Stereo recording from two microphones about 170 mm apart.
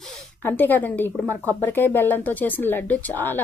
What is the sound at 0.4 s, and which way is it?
Speech, 10° left (ahead or behind).